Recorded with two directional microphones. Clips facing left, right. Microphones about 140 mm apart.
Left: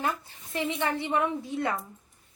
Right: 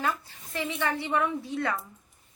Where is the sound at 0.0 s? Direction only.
20° left (ahead or behind).